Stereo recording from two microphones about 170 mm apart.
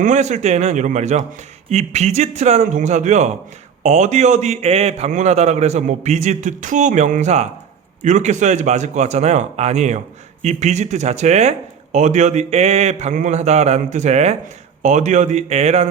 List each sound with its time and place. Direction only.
0.0 s speech: 45° right (ahead or behind)